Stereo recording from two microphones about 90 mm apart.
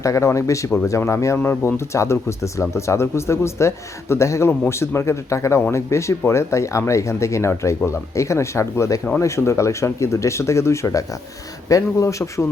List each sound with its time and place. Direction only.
0.0 s speech: 35° left (ahead or behind)